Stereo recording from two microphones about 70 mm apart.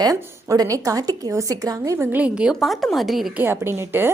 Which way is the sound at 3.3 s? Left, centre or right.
Right.